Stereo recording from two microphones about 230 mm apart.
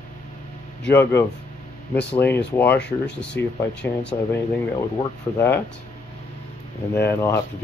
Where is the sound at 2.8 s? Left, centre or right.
Left.